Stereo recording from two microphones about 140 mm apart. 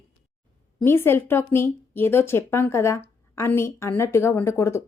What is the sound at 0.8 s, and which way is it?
Speech, 15° left (ahead or behind).